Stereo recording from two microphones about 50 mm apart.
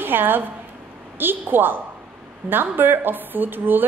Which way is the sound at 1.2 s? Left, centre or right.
Right.